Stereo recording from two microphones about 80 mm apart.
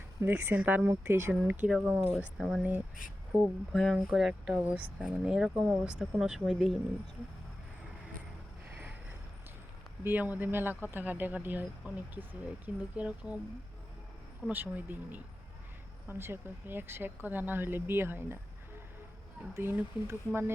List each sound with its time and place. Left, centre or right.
0.3 s speech: right
1.6 s speech: centre
2.4 s speech: centre
4.5 s speech: centre
10.0 s speech: right
14.5 s speech: right
19.5 s speech: right